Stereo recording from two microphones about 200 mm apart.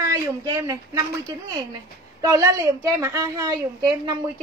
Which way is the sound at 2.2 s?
15° right (ahead or behind).